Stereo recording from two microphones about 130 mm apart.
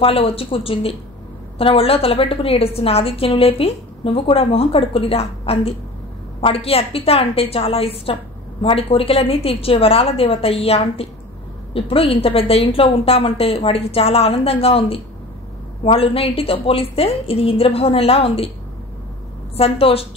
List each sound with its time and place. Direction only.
0.0 s a woman's voice: 45° left (ahead or behind)
19.5 s a woman's voice: 50° left (ahead or behind)